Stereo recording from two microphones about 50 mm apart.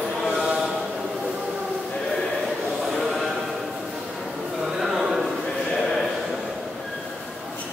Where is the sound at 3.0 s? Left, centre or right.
Centre.